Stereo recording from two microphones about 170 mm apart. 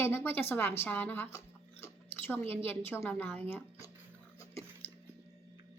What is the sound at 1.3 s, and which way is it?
Chewing, 15° left (ahead or behind).